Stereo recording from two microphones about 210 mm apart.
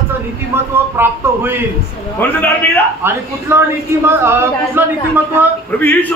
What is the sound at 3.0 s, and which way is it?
Speech, 10° right (ahead or behind).